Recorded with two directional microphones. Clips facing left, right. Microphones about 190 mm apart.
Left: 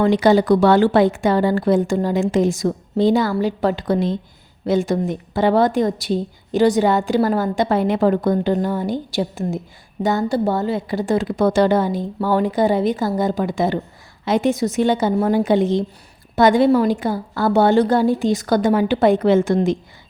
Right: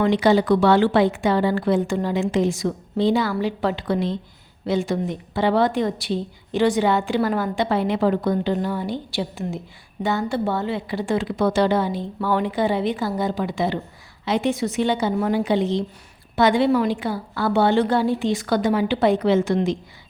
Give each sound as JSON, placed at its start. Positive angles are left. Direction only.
{"t": 0.0, "sound": "a woman's voice", "side_deg": 45}